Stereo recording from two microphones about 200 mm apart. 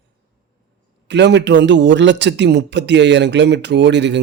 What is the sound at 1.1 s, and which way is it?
A man's voice, 60° right (ahead or behind).